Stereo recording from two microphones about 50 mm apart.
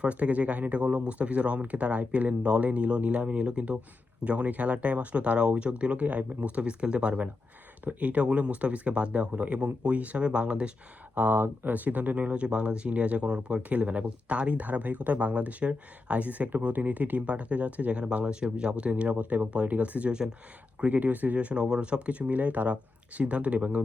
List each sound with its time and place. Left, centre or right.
0.0 s speech: right
11.1 s speech: right; by 20.3 s centre
20.8 s speech: right